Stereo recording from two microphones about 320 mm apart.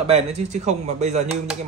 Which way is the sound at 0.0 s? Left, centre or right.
Centre.